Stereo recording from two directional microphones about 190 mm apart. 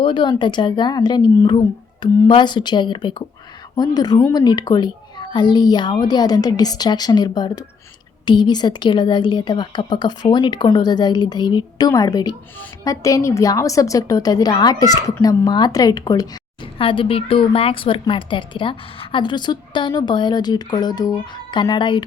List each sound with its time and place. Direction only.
0.0 s a woman's voice: 25° left (ahead or behind)